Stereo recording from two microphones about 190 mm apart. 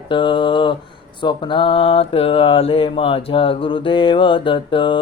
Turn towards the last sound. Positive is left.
turn(degrees=25)  # may be behind; listen again after turning